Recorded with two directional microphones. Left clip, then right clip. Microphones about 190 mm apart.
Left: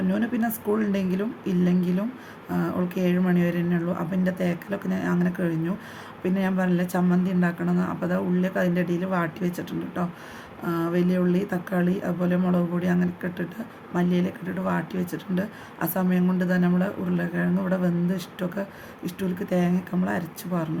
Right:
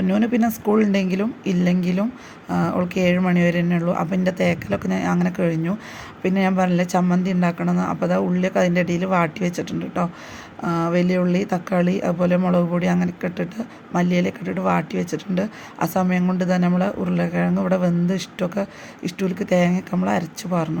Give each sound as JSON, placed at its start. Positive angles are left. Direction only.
{"t": 0.1, "sound": "speech", "side_deg": -30}